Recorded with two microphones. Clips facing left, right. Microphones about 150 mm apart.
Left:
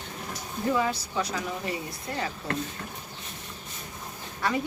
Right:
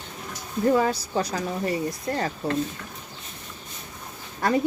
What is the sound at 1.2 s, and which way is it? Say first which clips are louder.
Speech: right 4 dB; 40° right (ahead or behind).